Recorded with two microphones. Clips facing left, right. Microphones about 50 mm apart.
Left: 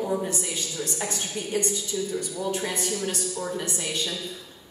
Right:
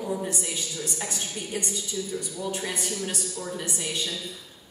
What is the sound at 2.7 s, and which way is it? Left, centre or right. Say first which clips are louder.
A woman's voice: left 3 dB; centre.